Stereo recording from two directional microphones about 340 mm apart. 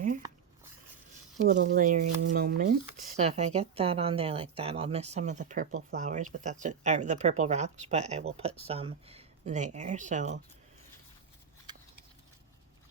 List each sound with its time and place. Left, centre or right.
1.5 s speech: right